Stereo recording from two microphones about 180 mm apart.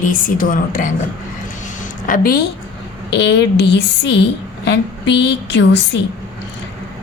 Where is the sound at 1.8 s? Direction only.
50° left (ahead or behind).